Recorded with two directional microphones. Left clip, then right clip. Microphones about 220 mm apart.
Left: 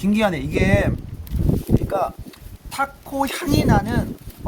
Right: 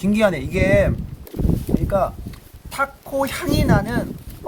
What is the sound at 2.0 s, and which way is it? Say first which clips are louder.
Speech: right 2 dB; centre (ahead or behind).